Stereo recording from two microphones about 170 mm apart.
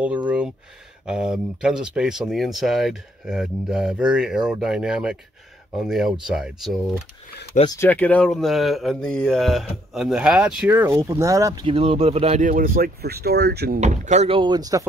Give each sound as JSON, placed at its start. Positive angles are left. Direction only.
{"t": 0.0, "sound": "a sound", "side_deg": -10}
{"t": 1.0, "sound": "speech", "side_deg": -5}
{"t": 7.8, "sound": "speech", "side_deg": 10}
{"t": 11.6, "sound": "speech", "side_deg": -35}
{"t": 13.7, "sound": "speech", "side_deg": -45}